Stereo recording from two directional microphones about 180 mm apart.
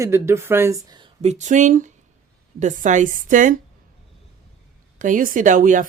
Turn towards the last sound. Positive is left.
turn(degrees=-45)  # may be behind; listen again after turning